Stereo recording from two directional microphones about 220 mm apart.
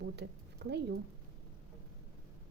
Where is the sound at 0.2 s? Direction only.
50° right (ahead or behind).